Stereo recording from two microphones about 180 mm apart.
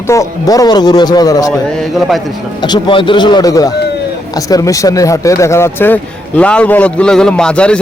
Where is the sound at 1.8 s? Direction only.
Centre (ahead or behind).